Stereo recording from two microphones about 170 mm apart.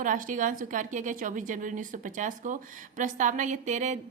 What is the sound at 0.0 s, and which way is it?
A woman's voice, 50° right (ahead or behind).